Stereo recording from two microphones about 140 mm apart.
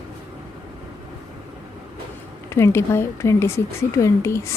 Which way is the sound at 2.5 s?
20° left (ahead or behind).